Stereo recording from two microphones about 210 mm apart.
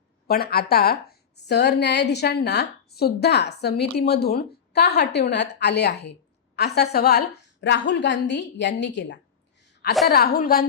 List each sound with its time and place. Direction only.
0.3 s a woman's voice: 50° left (ahead or behind)
9.6 s a sound: 55° left (ahead or behind)
10.1 s a woman's voice: 45° left (ahead or behind)